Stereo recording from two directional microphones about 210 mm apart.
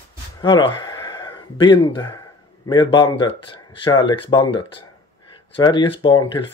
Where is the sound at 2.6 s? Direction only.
20° left (ahead or behind).